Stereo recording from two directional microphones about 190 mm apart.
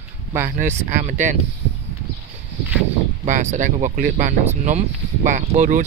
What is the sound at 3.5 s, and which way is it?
Speech, 40° right (ahead or behind).